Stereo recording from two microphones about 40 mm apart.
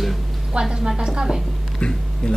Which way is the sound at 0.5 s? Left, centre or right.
Centre.